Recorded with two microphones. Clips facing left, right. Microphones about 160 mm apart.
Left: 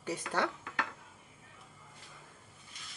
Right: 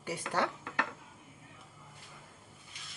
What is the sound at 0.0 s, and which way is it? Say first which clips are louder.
Speech: even; 10° right (ahead or behind).